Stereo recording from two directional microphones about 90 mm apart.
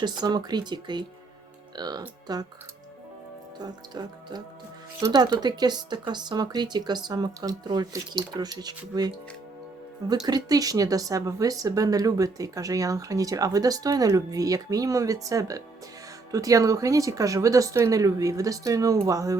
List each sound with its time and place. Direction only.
0.0 s speech: 50° right (ahead or behind)
3.6 s speech: 50° right (ahead or behind)
10.2 s speech: 45° right (ahead or behind)